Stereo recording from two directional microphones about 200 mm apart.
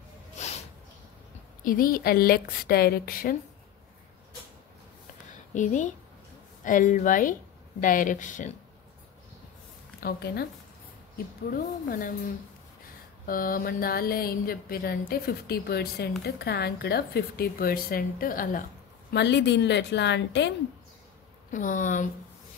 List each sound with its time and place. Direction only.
0.4 s a sound: 35° left (ahead or behind)
1.6 s mantra: 45° left (ahead or behind)
5.5 s speech: 40° left (ahead or behind)
9.9 s a woman's voice: 50° left (ahead or behind)
11.5 s mantra: 45° left (ahead or behind)
13.3 s mantra: 45° left (ahead or behind)
19.1 s a woman's voice: 60° left (ahead or behind)
21.5 s speech: 40° left (ahead or behind)